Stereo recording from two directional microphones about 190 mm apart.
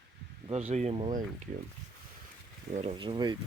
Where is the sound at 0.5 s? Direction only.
35° right (ahead or behind).